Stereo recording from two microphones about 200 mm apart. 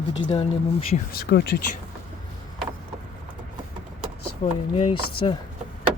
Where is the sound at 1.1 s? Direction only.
50° left (ahead or behind).